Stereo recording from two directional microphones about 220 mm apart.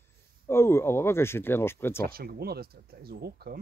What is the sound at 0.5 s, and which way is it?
Speech, 10° left (ahead or behind).